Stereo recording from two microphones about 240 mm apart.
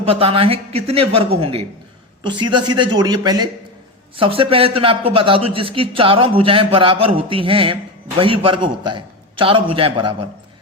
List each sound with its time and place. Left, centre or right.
0.0 s a man's voice: right